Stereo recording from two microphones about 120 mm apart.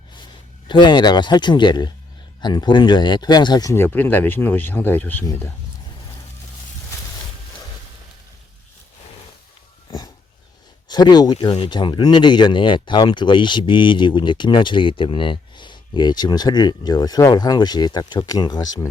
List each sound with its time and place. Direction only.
0.7 s speech: 40° left (ahead or behind)
3.8 s speech: 15° left (ahead or behind)
10.8 s speech: 35° left (ahead or behind)
11.3 s speech: 50° left (ahead or behind)